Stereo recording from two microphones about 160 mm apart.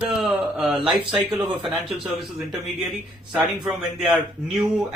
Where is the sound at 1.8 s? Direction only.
Centre (ahead or behind).